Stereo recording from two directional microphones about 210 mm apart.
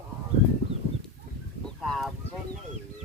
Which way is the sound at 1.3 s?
45° right (ahead or behind).